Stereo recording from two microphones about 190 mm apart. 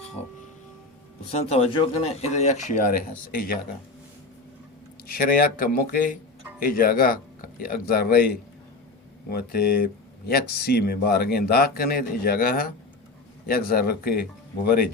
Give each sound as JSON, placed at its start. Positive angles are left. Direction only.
{"t": 1.3, "sound": "speech", "side_deg": 30}
{"t": 5.0, "sound": "speech", "side_deg": 50}
{"t": 9.3, "sound": "speech", "side_deg": 55}